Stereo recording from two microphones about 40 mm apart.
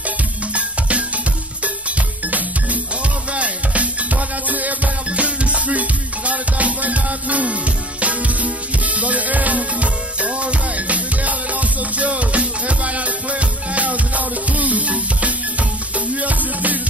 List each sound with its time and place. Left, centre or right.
0.0 s music: right